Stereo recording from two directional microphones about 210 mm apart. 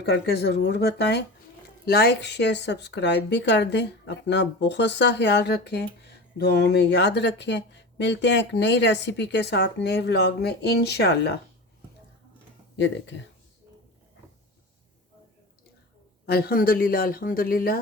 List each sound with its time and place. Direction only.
0.0 s speech: 50° left (ahead or behind)
12.7 s speech: 60° left (ahead or behind)
16.2 s speech: 45° left (ahead or behind)